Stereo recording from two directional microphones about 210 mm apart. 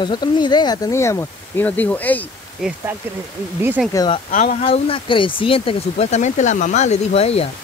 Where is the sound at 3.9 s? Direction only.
20° left (ahead or behind).